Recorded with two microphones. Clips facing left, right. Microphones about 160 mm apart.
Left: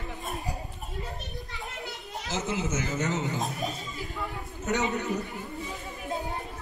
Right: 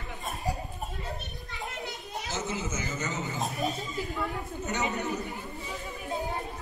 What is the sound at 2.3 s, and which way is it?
A man's voice, 80° left.